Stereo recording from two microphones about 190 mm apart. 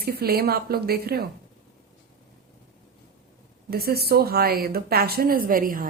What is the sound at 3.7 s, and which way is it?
Speech, 55° right (ahead or behind).